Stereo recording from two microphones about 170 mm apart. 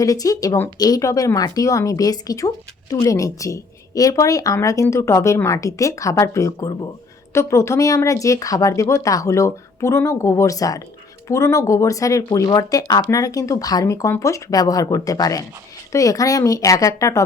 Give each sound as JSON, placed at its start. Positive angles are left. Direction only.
{"t": 0.0, "sound": "speech", "side_deg": 20}